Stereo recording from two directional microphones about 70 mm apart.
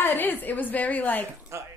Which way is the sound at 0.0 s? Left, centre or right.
Left.